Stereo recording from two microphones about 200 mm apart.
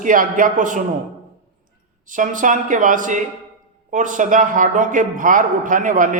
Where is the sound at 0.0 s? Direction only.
40° right (ahead or behind).